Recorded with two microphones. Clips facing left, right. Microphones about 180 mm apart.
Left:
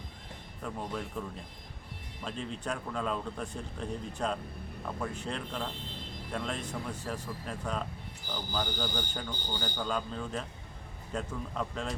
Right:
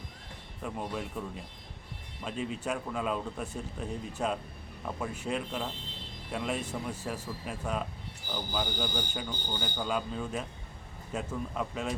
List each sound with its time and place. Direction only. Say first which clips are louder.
0.6 s speech: right 1 dB; 5° right (ahead or behind)
2.2 s speech: right 3 dB; 5° right (ahead or behind)